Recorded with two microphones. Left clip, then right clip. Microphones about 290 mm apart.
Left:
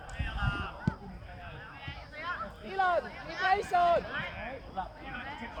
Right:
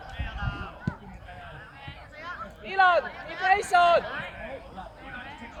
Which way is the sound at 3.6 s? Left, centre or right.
Right.